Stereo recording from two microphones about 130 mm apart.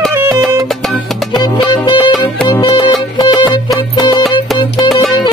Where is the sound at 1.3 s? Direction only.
35° left (ahead or behind).